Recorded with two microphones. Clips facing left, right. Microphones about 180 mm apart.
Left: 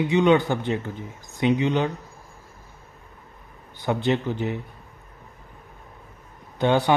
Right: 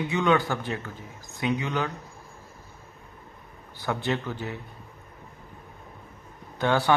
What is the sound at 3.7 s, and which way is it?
Speech, 20° left (ahead or behind).